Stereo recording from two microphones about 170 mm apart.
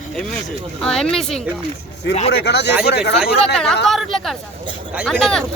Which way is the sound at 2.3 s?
80° left.